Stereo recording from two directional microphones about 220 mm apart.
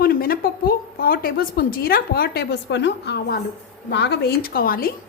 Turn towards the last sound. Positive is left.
turn(degrees=40)  # may be behind; listen again after turning